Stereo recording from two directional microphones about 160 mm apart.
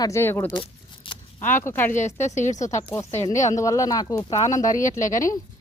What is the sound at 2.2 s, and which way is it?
Speech, 45° left (ahead or behind).